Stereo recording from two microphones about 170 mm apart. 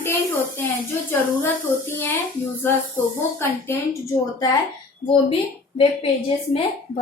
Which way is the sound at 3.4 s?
15° left (ahead or behind).